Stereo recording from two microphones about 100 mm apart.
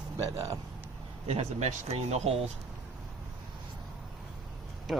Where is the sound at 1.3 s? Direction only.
90° right.